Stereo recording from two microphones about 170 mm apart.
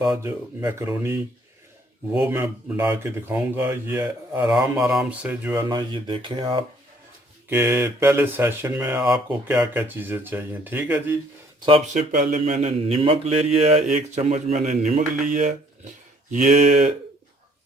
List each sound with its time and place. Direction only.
0.0 s speech: 20° right (ahead or behind)
5.6 s speech: 25° right (ahead or behind)
7.5 s speech: 10° right (ahead or behind)
11.9 s speech: 50° right (ahead or behind)